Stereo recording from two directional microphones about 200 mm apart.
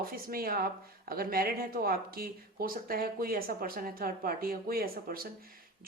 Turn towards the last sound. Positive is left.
turn(degrees=-45)  # may be behind; listen again after turning